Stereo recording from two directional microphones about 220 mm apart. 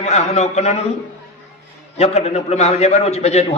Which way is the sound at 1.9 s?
30° left (ahead or behind).